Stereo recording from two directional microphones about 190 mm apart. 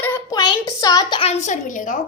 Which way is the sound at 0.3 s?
20° left (ahead or behind).